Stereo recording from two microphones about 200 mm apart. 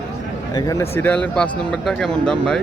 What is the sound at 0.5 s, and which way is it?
Speech, 15° left (ahead or behind).